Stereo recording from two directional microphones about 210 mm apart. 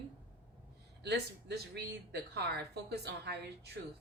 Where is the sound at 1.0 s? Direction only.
50° right (ahead or behind).